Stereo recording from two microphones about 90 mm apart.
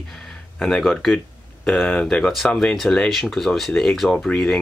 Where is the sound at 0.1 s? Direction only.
5° left (ahead or behind).